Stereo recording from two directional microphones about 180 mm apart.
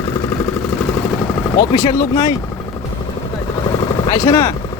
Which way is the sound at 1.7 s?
20° left (ahead or behind).